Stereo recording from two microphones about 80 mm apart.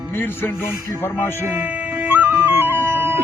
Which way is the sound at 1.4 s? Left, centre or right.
Right.